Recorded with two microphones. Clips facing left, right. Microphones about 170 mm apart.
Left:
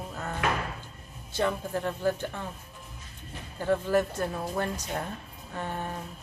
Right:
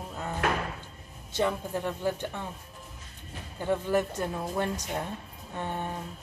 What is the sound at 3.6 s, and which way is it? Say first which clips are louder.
Speech: left 2 dB; 15° right (ahead or behind).